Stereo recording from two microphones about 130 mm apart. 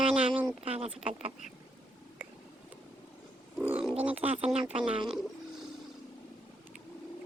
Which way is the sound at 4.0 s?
10° right (ahead or behind).